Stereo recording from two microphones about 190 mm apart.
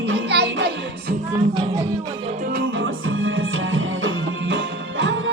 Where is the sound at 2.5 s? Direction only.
65° right (ahead or behind).